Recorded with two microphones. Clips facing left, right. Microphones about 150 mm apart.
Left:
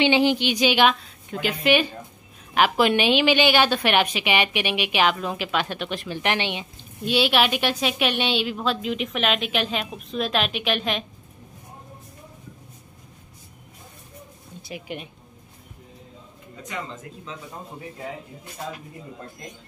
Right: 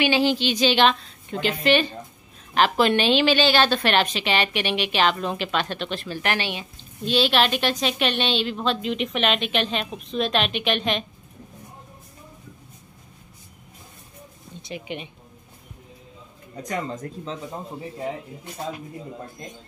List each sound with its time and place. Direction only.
0.0 s a woman's voice: 20° left (ahead or behind)
14.6 s speech: 5° left (ahead or behind)
16.6 s speech: 40° right (ahead or behind)